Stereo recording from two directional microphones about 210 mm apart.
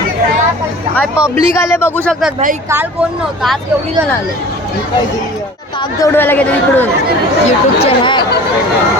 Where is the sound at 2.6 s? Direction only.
10° right (ahead or behind).